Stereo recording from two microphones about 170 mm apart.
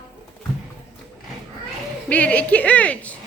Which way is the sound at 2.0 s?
10° left (ahead or behind).